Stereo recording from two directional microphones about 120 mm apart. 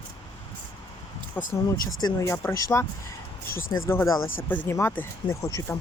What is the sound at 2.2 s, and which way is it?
Speech, 20° left (ahead or behind).